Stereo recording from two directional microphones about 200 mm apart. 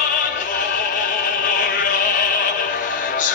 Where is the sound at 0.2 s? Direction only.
40° left (ahead or behind).